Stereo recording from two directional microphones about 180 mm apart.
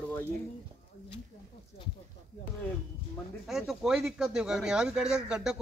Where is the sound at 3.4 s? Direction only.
Centre (ahead or behind).